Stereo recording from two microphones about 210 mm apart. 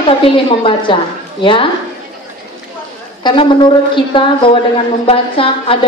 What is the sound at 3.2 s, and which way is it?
A woman's voice, 20° left (ahead or behind).